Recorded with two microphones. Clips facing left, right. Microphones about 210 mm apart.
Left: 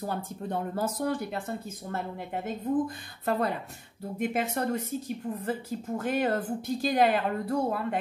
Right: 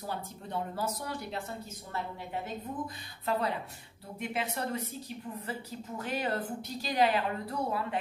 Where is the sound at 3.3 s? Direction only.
50° left (ahead or behind).